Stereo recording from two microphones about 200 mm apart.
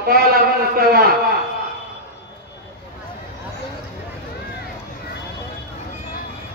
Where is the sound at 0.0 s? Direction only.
50° right (ahead or behind).